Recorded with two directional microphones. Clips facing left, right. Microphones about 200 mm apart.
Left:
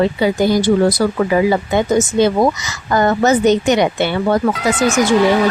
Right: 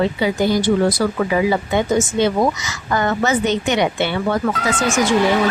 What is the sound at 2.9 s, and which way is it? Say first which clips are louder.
A woman's voice: left 5 dB; 40° left (ahead or behind).